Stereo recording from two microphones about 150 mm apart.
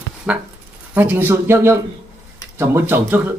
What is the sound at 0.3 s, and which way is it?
Speech, 5° right (ahead or behind).